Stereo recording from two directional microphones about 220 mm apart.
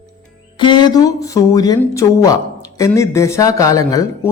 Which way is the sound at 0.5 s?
20° left (ahead or behind).